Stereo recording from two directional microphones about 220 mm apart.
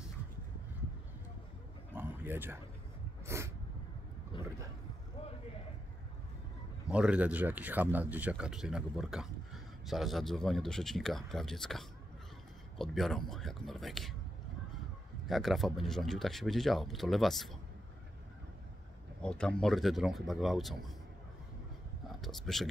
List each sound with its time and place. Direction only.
2.0 s a sound: 10° right (ahead or behind)
3.3 s sneeze: 10° right (ahead or behind)
4.3 s vehicle: 20° left (ahead or behind)
6.9 s speech: 5° right (ahead or behind)
15.2 s speech: centre (ahead or behind)
19.2 s speech: 5° left (ahead or behind)
22.2 s speech: centre (ahead or behind)